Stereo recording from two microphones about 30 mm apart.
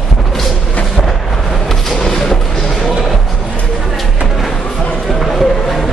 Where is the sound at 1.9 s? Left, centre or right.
Centre.